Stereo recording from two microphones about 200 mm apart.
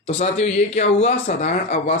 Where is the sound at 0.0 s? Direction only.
30° left (ahead or behind).